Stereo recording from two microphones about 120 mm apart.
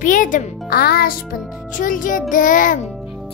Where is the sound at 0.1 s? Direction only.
90° left.